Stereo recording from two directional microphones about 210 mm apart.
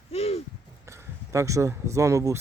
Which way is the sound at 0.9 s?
15° right (ahead or behind).